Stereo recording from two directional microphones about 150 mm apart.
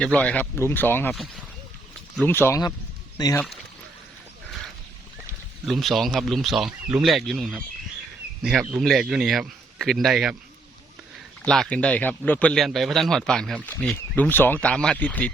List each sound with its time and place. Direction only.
0.0 s speech: 5° left (ahead or behind)
1.1 s a man's voice: centre (ahead or behind)
2.1 s speech: 15° left (ahead or behind)
3.2 s speech: 25° left (ahead or behind)
5.6 s a man's voice: centre (ahead or behind)
11.4 s speech: 5° left (ahead or behind)